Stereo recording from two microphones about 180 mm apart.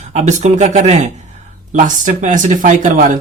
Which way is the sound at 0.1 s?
40° right (ahead or behind).